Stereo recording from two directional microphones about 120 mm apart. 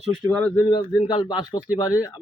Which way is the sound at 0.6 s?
40° left (ahead or behind).